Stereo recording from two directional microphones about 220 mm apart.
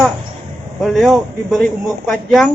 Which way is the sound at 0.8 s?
Centre (ahead or behind).